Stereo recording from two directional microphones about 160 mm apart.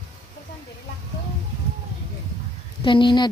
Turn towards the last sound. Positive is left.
turn(degrees=30)  # may be behind; listen again after turning